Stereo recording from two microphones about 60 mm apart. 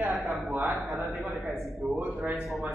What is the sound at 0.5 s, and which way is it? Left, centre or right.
Speech, right.